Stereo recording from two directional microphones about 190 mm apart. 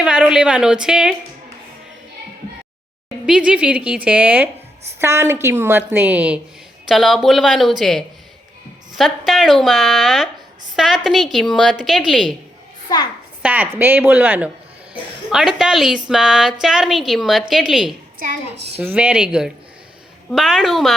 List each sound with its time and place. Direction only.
0.0 s a woman's voice: 5° right (ahead or behind)
3.2 s a woman's voice: 5° right (ahead or behind)
12.9 s a child's voice: 20° left (ahead or behind)
13.4 s a woman's voice: 10° right (ahead or behind)